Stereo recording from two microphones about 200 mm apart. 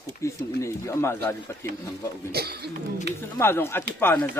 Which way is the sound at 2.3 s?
50° right (ahead or behind).